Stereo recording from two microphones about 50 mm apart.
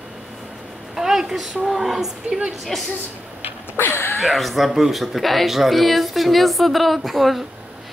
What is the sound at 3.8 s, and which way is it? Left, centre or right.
Speech, left.